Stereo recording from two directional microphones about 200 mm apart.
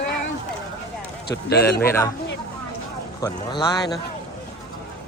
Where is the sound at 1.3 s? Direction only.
55° left (ahead or behind).